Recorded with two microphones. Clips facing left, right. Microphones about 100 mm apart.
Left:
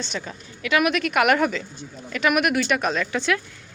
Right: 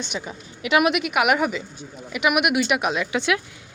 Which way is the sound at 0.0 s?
15° right (ahead or behind).